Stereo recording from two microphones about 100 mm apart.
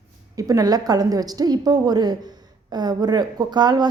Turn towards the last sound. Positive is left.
turn(degrees=-45)  # may be behind; listen again after turning